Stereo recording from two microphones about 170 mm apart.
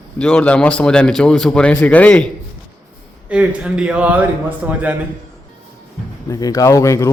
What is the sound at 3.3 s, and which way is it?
A man's voice, 5° right (ahead or behind).